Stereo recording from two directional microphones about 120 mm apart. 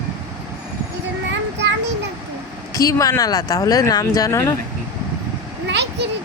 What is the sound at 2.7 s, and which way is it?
Speech, 30° left (ahead or behind).